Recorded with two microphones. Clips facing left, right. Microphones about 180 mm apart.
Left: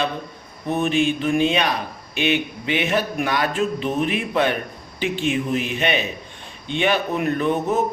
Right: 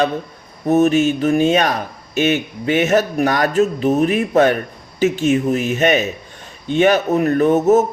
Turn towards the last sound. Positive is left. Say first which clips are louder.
# right 8 dB
turn(degrees=-40)  # may be behind; listen again after turning